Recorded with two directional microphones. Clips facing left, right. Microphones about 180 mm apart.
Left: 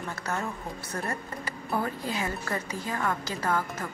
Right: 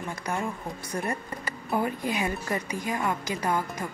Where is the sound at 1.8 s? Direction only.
15° right (ahead or behind).